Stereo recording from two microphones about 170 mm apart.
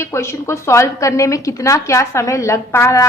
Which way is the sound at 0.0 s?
15° left (ahead or behind).